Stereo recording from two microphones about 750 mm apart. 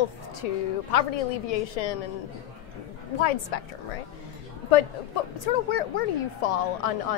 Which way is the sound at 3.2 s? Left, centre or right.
Left.